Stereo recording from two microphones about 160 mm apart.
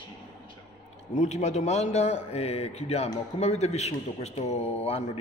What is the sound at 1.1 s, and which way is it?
A man's voice, 45° left (ahead or behind).